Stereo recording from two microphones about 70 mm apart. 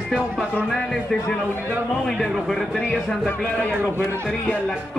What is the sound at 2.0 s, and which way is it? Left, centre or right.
Music, centre.